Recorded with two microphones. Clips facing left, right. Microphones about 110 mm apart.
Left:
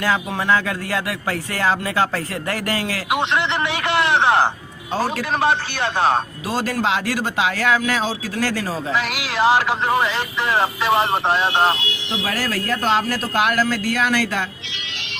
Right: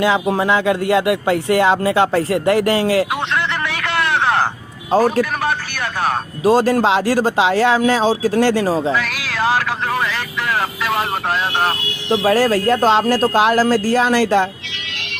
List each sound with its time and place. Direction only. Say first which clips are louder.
0.3 s speech: right 4 dB; 20° right (ahead or behind)
3.1 s a sound: left 1 dB; 20° left (ahead or behind)
4.9 s speech: right 8 dB; 45° right (ahead or behind)
5.4 s speech: left 2 dB; 25° left (ahead or behind)
6.4 s speech: right 9 dB; 40° right (ahead or behind)
9.0 s speech: left 1 dB; 20° left (ahead or behind)
12.0 s speech: right 11 dB; 30° right (ahead or behind)